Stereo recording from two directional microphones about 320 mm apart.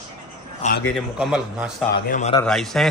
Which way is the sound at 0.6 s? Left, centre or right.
Left.